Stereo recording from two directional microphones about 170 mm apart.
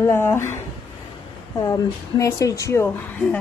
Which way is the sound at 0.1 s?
15° left (ahead or behind).